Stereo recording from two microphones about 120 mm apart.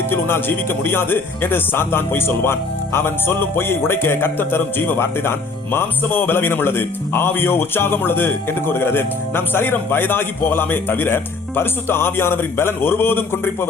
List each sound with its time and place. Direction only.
0.1 s speech: 20° left (ahead or behind)